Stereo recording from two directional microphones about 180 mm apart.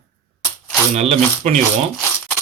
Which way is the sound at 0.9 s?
40° right (ahead or behind).